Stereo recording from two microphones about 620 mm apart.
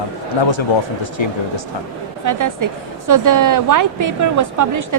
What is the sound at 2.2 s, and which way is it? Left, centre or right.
A woman's voice, right.